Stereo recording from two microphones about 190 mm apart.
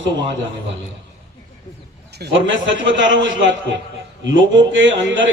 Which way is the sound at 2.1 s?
70° right (ahead or behind).